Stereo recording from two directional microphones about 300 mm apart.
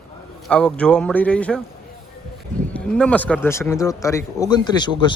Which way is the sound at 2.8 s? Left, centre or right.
Centre.